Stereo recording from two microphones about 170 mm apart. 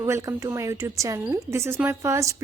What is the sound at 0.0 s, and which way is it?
A woman's voice, 20° right (ahead or behind).